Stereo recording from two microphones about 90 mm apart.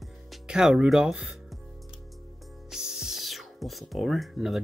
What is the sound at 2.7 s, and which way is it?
Music, 5° right (ahead or behind).